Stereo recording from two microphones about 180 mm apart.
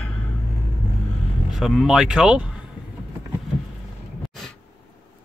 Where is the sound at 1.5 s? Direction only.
Centre (ahead or behind).